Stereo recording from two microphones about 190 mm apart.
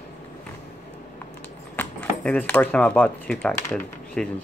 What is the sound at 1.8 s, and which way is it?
Speech, 10° left (ahead or behind).